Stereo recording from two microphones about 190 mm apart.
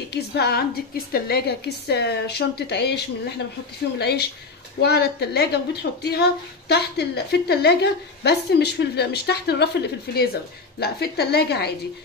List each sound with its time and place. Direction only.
0.1 s a woman's voice: 60° left (ahead or behind)